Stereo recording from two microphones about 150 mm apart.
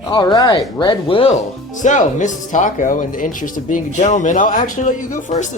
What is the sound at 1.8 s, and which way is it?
Speech, 55° left (ahead or behind).